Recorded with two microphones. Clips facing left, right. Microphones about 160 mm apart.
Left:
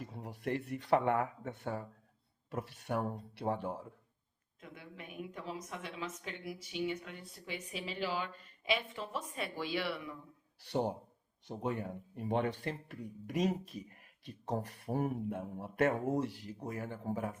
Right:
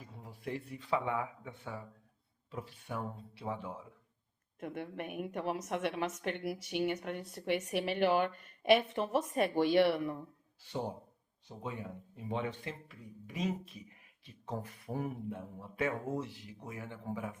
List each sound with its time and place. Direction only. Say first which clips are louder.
0.0 s a man's voice: left 4 dB; 75° left (ahead or behind)
1.5 s speech: left 5 dB; 45° left (ahead or behind)
2.5 s speech: left 4 dB; 70° left (ahead or behind)
4.6 s a woman's voice: right 10 dB; 60° right (ahead or behind)
10.7 s speech: left 4 dB; 70° left (ahead or behind)
13.3 s speech: left 3 dB; 45° left (ahead or behind)
15.6 s speech: left 4 dB; 65° left (ahead or behind)
16.6 s speech: left 3 dB; 40° left (ahead or behind)